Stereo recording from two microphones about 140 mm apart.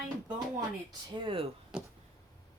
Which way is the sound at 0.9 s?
40° right (ahead or behind).